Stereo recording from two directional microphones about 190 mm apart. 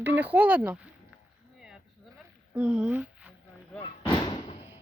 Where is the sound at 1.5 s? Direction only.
5° right (ahead or behind).